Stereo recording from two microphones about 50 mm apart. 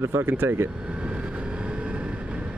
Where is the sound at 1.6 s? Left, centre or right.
Right.